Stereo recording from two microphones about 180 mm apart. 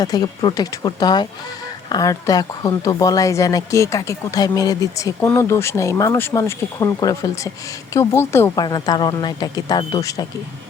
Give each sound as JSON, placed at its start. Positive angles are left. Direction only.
{"t": 0.0, "sound": "a woman's voice", "side_deg": 20}